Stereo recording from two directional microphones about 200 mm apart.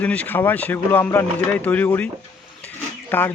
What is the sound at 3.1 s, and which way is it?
Speech, 10° left (ahead or behind).